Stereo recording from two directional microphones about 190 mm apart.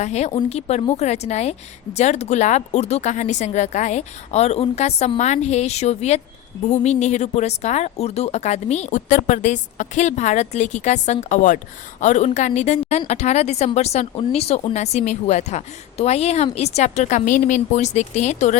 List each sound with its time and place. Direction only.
0.0 s a woman's voice: 35° left (ahead or behind)